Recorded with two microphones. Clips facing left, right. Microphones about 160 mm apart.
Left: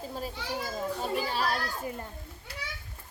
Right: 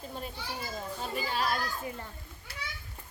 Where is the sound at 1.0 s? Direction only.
40° left (ahead or behind).